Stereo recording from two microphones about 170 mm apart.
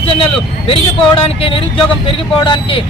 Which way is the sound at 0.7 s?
30° left (ahead or behind).